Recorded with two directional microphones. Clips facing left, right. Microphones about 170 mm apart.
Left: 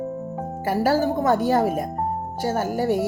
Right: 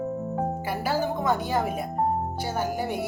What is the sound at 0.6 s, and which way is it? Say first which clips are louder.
Speech: left 11 dB; 45° left (ahead or behind).